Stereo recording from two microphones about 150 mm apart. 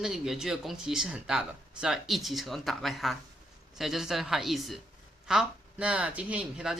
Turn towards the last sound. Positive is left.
turn(degrees=-5)  # may be behind; listen again after turning